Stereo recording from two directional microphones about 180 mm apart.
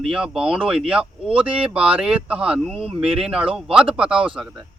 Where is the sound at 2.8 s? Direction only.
30° right (ahead or behind).